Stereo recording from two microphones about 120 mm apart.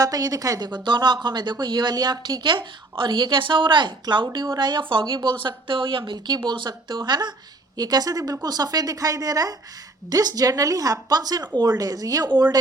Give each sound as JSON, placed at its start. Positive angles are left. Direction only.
{"t": 0.0, "sound": "a woman's voice", "side_deg": -30}